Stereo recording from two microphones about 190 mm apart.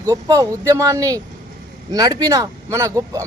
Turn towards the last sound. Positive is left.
turn(degrees=-15)  # may be behind; listen again after turning